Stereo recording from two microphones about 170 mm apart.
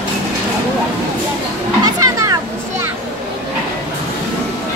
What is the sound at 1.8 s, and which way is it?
Children playing, 20° right (ahead or behind).